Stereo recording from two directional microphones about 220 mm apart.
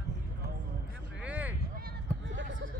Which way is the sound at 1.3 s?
5° right (ahead or behind).